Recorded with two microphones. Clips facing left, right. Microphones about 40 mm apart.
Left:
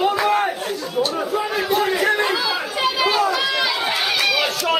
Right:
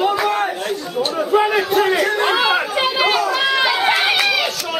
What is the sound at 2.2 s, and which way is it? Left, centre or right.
Chatter, right.